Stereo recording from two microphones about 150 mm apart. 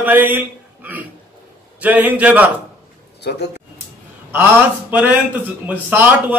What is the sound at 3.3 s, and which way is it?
Speech, 90° left.